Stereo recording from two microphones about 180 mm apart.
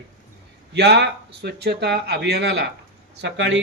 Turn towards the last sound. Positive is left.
turn(degrees=-80)